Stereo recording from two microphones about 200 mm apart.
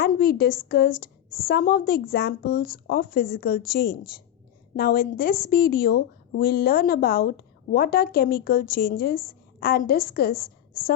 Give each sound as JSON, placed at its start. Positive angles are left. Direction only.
{"t": 0.0, "sound": "a woman's voice", "side_deg": 50}